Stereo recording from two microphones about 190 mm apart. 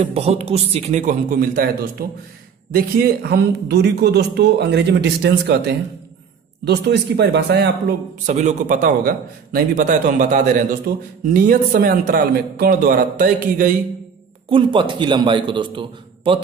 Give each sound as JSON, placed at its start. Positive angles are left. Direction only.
{"t": 0.0, "sound": "a man's voice", "side_deg": -35}
{"t": 8.3, "sound": "a man's voice", "side_deg": -40}
{"t": 14.5, "sound": "a man's voice", "side_deg": -25}